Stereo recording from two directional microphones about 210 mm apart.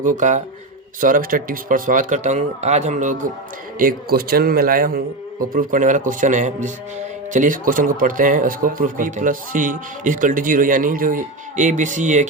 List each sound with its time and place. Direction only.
0.0 s a man's voice: 35° right (ahead or behind)